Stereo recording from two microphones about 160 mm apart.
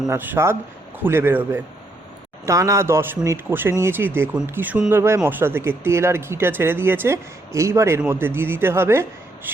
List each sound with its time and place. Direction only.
0.1 s speech: 15° right (ahead or behind)